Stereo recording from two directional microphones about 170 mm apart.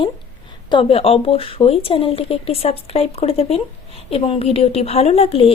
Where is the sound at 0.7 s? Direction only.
30° left (ahead or behind).